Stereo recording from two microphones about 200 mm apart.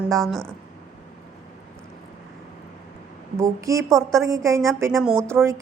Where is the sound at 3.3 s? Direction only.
15° right (ahead or behind).